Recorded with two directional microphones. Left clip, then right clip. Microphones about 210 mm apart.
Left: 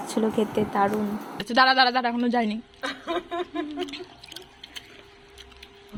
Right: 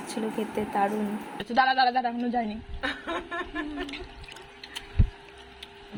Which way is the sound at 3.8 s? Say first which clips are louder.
Left 3 dB; 10° left (ahead or behind).